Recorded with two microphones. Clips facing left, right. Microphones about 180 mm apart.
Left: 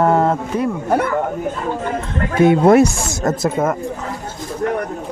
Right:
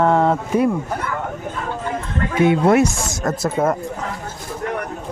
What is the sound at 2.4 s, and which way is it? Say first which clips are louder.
Speech: left 4 dB; 40° left (ahead or behind).